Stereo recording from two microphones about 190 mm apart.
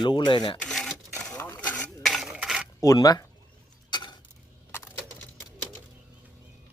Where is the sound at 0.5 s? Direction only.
5° left (ahead or behind).